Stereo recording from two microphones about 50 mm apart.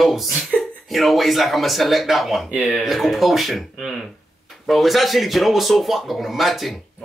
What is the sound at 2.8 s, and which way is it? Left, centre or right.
Speech, centre.